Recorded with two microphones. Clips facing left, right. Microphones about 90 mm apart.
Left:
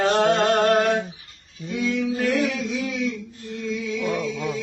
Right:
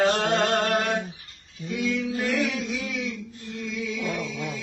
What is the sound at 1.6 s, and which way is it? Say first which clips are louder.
Mantra: left 3 dB; 30° left (ahead or behind).